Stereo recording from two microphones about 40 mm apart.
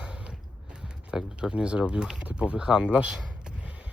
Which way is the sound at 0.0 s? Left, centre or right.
Right.